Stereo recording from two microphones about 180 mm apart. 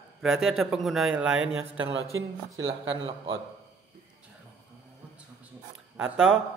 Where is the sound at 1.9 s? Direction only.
90° right.